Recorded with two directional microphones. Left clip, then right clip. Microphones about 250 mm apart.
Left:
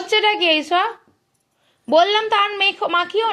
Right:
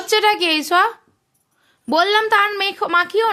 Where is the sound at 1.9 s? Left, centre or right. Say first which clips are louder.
Left 2 dB; right.